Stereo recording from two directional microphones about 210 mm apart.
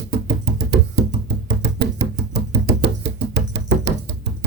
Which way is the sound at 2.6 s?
55° right (ahead or behind).